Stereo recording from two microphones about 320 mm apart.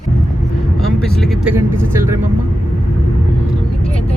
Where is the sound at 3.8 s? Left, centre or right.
Centre.